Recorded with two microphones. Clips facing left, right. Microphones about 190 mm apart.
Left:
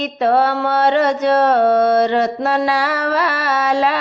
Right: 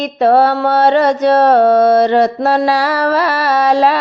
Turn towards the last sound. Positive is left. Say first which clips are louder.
# right 5 dB
turn(degrees=-35)  # may be behind; listen again after turning